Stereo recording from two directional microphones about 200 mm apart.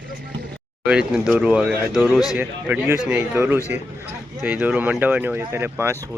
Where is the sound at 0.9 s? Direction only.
5° right (ahead or behind).